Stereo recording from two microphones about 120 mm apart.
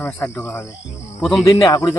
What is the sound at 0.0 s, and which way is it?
Speech, 10° left (ahead or behind).